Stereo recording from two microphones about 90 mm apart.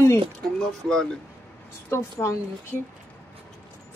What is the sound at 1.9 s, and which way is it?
Speech, 35° left (ahead or behind).